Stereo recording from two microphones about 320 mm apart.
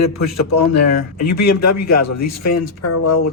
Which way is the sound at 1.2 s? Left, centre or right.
Left.